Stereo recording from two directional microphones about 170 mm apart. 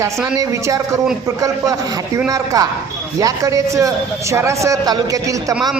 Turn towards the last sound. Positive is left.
turn(degrees=-20)  # may be behind; listen again after turning